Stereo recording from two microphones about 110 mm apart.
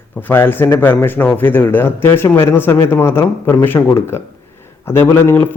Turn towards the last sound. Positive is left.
turn(degrees=20)  # may be behind; listen again after turning